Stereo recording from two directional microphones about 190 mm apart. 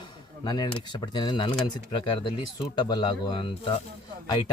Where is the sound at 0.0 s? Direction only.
25° left (ahead or behind).